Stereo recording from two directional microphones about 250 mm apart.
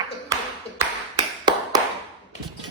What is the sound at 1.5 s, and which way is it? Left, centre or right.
Tap, centre.